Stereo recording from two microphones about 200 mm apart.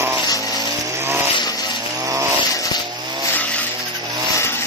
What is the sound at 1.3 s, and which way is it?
Chainsaw, 20° left (ahead or behind).